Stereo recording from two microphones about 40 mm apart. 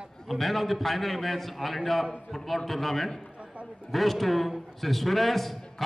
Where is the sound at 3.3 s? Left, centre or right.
Right.